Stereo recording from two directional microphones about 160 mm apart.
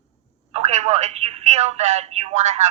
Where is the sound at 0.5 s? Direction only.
45° right (ahead or behind).